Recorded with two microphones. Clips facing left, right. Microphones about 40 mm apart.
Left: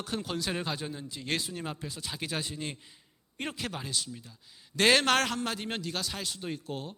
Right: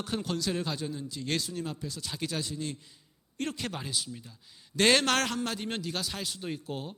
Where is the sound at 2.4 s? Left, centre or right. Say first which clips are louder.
Right 1 dB; left.